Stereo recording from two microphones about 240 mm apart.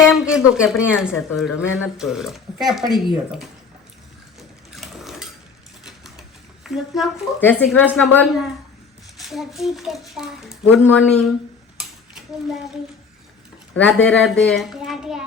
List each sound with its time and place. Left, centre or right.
0.1 s speech: centre
4.4 s a sound: centre
6.7 s a woman's voice: centre
13.7 s speech: centre